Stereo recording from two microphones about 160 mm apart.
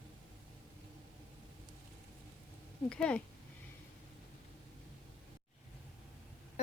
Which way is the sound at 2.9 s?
5° left (ahead or behind).